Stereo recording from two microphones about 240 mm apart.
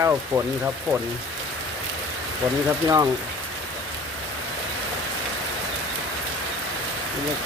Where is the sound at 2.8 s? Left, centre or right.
Centre.